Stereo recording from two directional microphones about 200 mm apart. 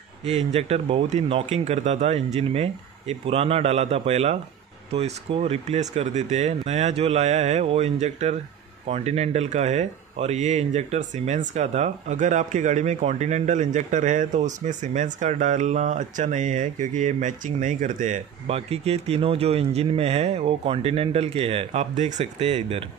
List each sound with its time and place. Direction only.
0.2 s speech: 30° right (ahead or behind)